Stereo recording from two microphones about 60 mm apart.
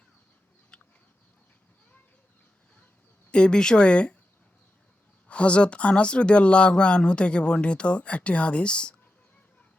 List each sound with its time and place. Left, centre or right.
0.7 s a sound: centre
3.3 s speech: centre
5.3 s speech: centre